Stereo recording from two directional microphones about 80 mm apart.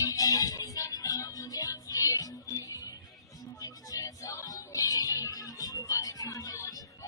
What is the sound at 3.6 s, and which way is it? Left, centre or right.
Music, left.